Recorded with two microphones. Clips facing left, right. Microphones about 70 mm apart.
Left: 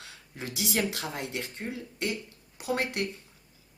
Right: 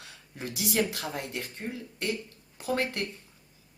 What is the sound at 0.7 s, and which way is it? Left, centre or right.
Speech, left.